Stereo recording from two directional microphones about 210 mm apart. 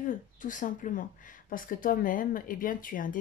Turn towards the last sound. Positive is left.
turn(degrees=40)  # may be behind; listen again after turning